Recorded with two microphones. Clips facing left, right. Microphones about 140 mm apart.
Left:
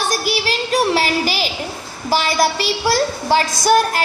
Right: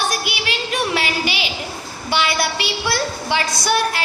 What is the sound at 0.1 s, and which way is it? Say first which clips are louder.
Child singing: left 4 dB; 40° left (ahead or behind).